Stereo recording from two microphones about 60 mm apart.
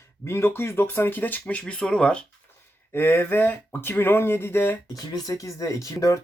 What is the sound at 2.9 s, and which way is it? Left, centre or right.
Speech, left.